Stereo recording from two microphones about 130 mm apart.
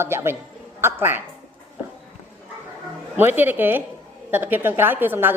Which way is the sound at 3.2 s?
15° right (ahead or behind).